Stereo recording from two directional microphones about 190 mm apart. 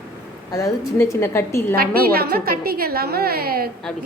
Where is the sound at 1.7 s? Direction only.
50° right (ahead or behind).